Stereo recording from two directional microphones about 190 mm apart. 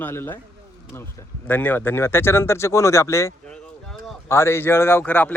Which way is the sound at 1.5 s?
10° left (ahead or behind).